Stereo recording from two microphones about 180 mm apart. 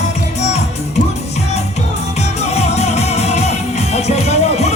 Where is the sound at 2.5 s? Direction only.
35° left (ahead or behind).